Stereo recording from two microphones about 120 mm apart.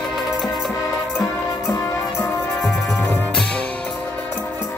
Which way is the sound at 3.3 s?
5° left (ahead or behind).